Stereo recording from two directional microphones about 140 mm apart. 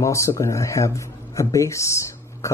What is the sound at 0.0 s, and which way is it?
Speech, 20° left (ahead or behind).